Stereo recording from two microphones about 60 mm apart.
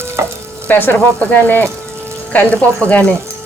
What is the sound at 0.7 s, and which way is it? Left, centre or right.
Speech, left.